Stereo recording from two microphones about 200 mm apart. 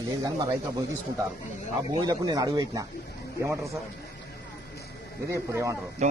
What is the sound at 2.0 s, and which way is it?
Speech, 20° right (ahead or behind).